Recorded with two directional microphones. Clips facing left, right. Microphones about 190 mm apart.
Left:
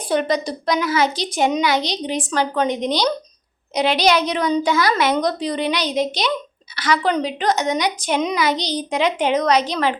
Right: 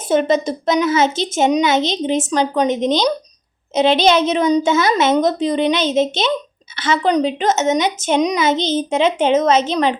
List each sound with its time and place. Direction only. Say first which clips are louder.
0.1 s a woman's voice: right 4 dB; 25° right (ahead or behind)